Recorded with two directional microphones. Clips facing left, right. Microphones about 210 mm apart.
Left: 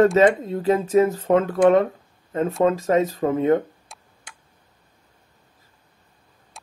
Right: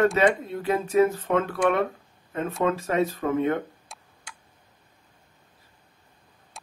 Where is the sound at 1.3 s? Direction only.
35° left (ahead or behind).